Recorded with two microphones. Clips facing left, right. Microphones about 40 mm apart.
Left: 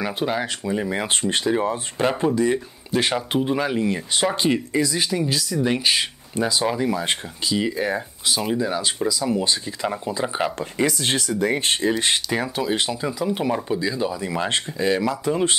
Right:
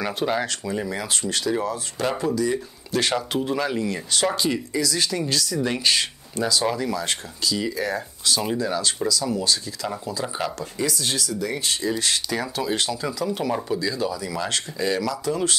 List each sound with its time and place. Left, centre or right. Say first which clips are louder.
0.0 s speech: even; centre
0.9 s speech: left 4 dB; left
2.9 s speech: left 2 dB; centre
4.5 s speech: left 3 dB; left
4.9 s speech: left 1 dB; centre